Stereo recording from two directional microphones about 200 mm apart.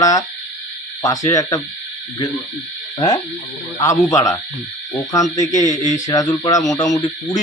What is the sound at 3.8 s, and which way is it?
Speech, 15° left (ahead or behind).